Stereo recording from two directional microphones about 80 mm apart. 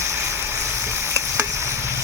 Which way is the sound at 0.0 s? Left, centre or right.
Right.